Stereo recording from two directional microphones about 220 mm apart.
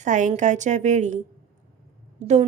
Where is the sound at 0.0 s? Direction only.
35° right (ahead or behind).